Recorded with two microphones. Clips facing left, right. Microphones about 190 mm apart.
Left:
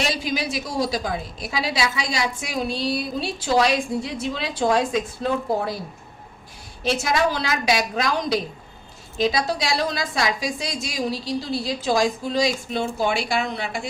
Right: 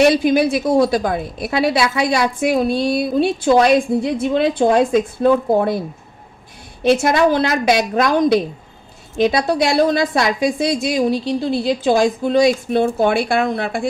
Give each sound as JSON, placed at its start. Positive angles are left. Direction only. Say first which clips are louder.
{"t": 0.0, "sound": "a woman's voice", "louder": "right 12 dB", "side_deg": -55}
{"t": 6.8, "sound": "a woman's voice", "louder": "right 8 dB", "side_deg": -55}